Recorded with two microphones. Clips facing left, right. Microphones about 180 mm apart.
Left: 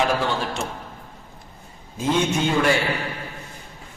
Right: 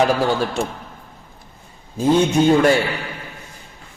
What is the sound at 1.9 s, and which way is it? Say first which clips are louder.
Speech: right 6 dB; 35° right (ahead or behind).